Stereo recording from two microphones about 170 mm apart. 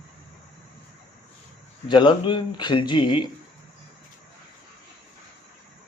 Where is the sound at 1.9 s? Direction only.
25° left (ahead or behind).